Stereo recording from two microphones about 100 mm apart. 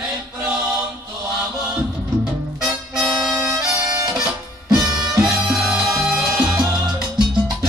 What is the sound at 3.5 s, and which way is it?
Music, 40° right (ahead or behind).